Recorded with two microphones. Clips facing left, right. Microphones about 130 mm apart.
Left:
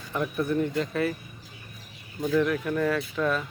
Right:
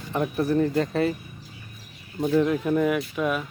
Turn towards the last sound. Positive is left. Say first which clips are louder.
# right 1 dB
turn(degrees=-10)  # may be behind; listen again after turning